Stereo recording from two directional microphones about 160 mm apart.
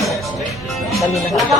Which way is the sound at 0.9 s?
Centre (ahead or behind).